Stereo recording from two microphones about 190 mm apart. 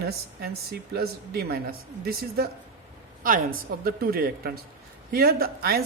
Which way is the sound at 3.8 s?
55° right (ahead or behind).